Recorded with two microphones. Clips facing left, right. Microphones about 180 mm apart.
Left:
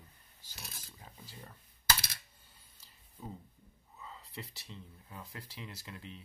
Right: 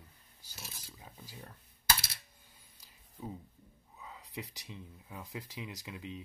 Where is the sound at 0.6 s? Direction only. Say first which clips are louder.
Right 1 dB; 5° right (ahead or behind).